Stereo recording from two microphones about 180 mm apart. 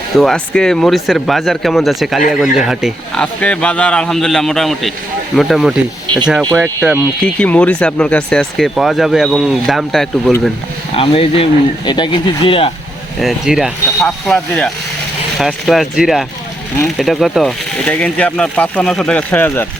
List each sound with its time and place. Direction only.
0.2 s speech: 5° left (ahead or behind)
7.3 s speech: 10° left (ahead or behind)
10.9 s speech: 30° left (ahead or behind)
13.1 s speech: centre (ahead or behind)